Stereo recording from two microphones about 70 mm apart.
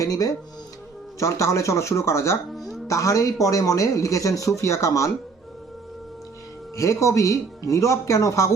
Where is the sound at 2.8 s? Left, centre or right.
Left.